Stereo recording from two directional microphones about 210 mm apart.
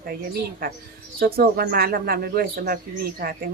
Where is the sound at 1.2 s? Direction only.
45° right (ahead or behind).